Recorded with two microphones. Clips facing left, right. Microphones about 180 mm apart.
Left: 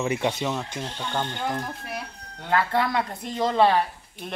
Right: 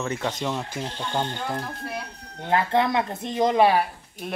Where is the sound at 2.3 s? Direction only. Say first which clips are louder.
Right 2 dB; 20° right (ahead or behind).